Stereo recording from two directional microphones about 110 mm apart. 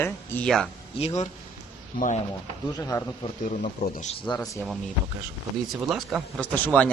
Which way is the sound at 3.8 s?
90° left.